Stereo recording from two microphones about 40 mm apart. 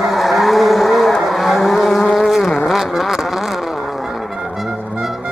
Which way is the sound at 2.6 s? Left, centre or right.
Centre.